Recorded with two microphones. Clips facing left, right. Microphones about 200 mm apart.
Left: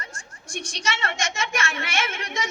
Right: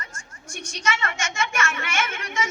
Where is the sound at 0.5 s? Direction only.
30° left (ahead or behind).